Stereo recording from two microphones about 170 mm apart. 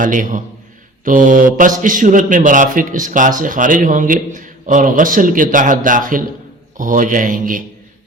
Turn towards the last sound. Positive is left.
turn(degrees=-55)  # may be behind; listen again after turning